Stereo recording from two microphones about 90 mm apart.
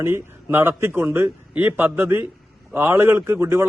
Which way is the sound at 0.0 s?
25° right (ahead or behind).